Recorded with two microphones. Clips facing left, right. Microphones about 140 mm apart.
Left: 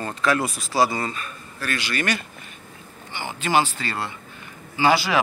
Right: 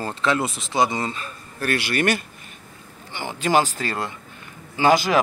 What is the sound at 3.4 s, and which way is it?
Speech, 40° right (ahead or behind).